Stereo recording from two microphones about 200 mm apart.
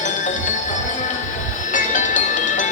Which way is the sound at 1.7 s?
40° left (ahead or behind).